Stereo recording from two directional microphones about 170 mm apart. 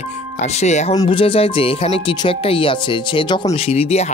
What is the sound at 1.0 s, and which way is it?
Speech, 30° left (ahead or behind).